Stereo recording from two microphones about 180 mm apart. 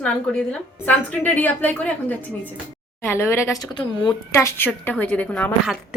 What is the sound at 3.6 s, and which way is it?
Speech, 25° left (ahead or behind).